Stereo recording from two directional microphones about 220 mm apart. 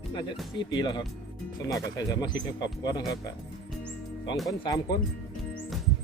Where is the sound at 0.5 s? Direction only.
20° left (ahead or behind).